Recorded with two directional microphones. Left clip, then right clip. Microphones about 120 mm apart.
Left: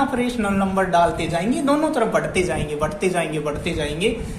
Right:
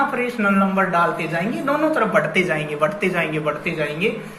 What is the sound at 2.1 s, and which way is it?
A woman's voice, 30° left (ahead or behind).